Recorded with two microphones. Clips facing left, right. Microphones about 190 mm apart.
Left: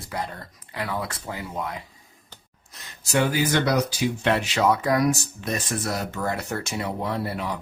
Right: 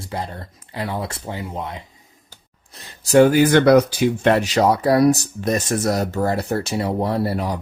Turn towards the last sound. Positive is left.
turn(degrees=-40)  # may be behind; listen again after turning